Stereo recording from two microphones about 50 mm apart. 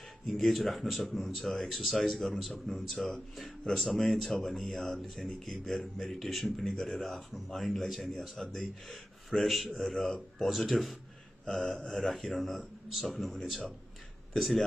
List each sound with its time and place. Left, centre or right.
0.5 s speech: centre